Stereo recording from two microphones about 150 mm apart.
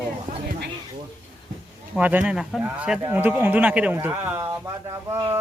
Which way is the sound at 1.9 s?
10° right (ahead or behind).